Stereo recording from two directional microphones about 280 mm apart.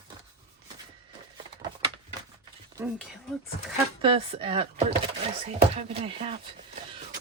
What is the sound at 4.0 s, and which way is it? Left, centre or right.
Speech, centre.